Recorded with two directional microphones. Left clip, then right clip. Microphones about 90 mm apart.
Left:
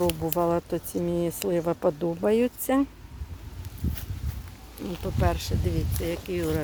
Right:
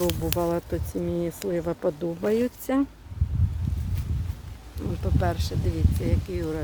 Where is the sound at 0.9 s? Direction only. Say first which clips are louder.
Left 1 dB; 10° left (ahead or behind).